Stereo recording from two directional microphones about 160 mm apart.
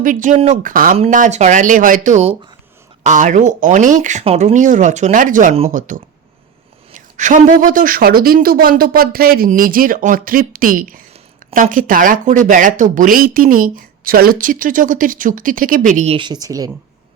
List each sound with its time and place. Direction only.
0.0 s speech: 55° right (ahead or behind)
16.1 s a woman's voice: 30° right (ahead or behind)